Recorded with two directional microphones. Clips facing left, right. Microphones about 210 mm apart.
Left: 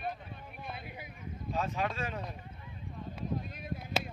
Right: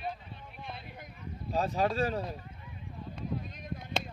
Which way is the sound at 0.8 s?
5° left (ahead or behind).